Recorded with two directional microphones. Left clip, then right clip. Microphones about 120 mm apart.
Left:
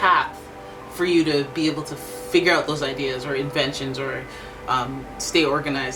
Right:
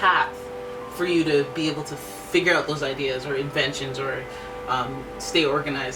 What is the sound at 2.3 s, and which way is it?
Speech, 35° left (ahead or behind).